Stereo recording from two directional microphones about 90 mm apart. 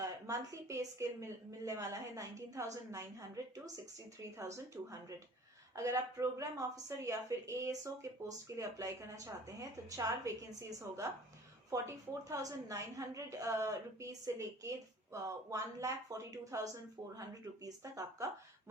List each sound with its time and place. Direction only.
0.0 s a woman's voice: 35° right (ahead or behind)